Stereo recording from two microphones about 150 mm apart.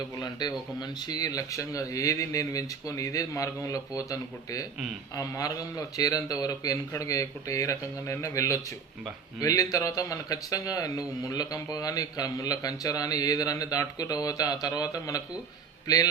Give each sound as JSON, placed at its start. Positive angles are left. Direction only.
{"t": 0.2, "sound": "speech", "side_deg": 25}